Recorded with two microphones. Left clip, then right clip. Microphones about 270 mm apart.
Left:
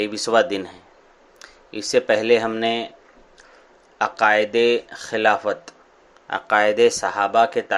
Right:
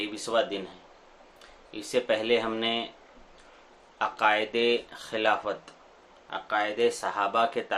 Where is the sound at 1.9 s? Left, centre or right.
Left.